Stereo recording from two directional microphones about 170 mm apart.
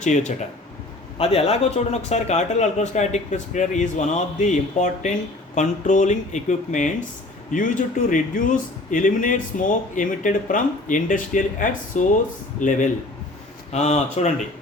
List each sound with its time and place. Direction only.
0.0 s a man's voice: 45° left (ahead or behind)